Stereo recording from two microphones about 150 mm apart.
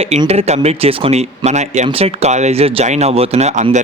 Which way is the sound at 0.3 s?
45° right (ahead or behind).